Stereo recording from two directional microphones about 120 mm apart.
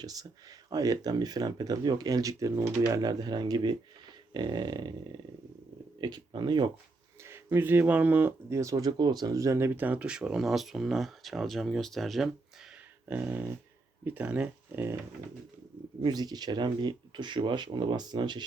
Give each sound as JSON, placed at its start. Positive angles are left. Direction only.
{"t": 0.0, "sound": "speech", "side_deg": -30}
{"t": 6.0, "sound": "speech", "side_deg": -35}
{"t": 7.3, "sound": "speech", "side_deg": -20}
{"t": 13.1, "sound": "speech", "side_deg": -15}
{"t": 16.0, "sound": "speech", "side_deg": -35}